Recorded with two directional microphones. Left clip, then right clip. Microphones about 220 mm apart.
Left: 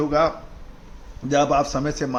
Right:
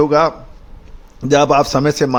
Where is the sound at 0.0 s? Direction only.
50° right (ahead or behind).